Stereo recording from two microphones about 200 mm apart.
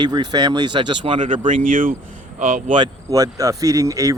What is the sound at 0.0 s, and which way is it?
Speech, 20° right (ahead or behind).